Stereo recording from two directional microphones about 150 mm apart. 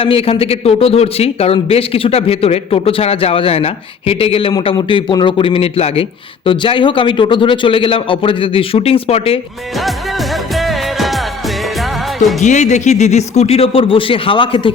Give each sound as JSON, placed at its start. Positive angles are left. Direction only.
{"t": 0.0, "sound": "a man's voice", "side_deg": 40}
{"t": 4.5, "sound": "a man's voice", "side_deg": 30}
{"t": 10.5, "sound": "music", "side_deg": 0}
{"t": 12.4, "sound": "speech", "side_deg": 50}